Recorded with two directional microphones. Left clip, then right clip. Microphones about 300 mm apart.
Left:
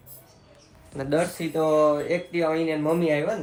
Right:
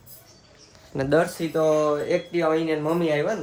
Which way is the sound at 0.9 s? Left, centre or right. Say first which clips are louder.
Right 5 dB; right.